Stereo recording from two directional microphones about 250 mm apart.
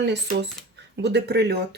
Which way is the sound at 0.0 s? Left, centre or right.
Right.